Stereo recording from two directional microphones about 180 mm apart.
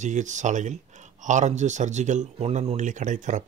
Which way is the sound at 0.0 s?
40° right (ahead or behind).